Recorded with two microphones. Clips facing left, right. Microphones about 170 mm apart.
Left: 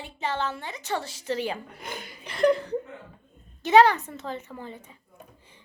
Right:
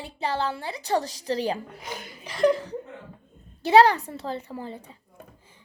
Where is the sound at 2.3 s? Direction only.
60° left (ahead or behind).